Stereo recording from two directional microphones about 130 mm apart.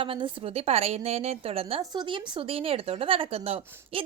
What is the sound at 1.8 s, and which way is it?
A woman's voice, 35° right (ahead or behind).